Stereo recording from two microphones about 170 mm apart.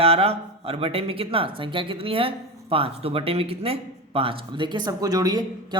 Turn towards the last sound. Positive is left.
turn(degrees=-25)  # may be behind; listen again after turning